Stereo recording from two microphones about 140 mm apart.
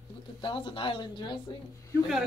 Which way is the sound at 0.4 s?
40° left (ahead or behind).